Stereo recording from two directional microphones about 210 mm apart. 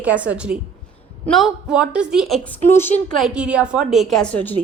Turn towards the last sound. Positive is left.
turn(degrees=5)  # may be behind; listen again after turning